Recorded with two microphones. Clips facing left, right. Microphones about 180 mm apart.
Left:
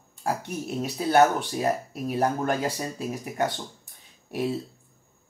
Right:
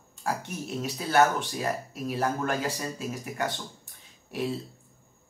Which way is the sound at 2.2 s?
35° left (ahead or behind).